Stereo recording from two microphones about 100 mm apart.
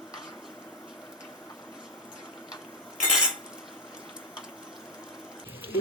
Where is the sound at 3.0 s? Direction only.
5° right (ahead or behind).